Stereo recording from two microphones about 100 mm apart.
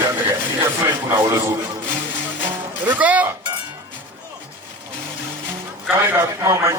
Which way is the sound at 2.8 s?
15° right (ahead or behind).